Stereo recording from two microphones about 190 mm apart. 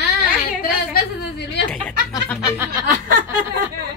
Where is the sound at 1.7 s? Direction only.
5° left (ahead or behind).